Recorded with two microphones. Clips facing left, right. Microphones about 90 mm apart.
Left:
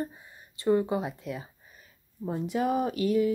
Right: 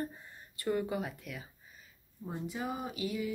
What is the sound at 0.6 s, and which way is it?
Speech, 25° left (ahead or behind).